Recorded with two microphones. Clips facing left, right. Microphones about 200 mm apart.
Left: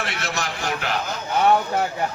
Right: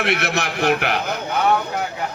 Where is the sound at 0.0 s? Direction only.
65° right (ahead or behind).